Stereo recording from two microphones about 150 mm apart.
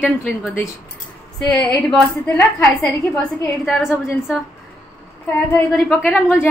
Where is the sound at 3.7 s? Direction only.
5° right (ahead or behind).